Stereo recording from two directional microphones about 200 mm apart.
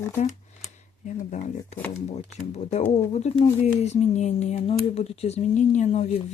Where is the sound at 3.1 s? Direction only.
30° left (ahead or behind).